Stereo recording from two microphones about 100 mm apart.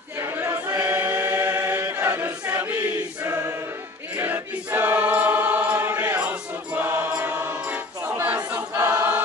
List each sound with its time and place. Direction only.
0.3 s choir: 30° right (ahead or behind)
0.8 s choir: 20° right (ahead or behind)